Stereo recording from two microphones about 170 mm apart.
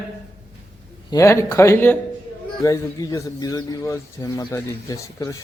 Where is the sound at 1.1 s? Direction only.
15° left (ahead or behind).